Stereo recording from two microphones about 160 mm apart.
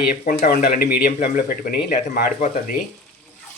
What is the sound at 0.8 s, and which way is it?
Speech, 70° left (ahead or behind).